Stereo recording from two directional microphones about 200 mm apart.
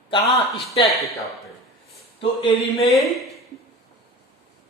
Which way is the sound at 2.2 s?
25° left (ahead or behind).